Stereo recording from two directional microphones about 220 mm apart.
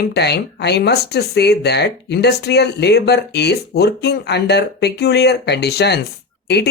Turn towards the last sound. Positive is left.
turn(degrees=50)  # may be behind; listen again after turning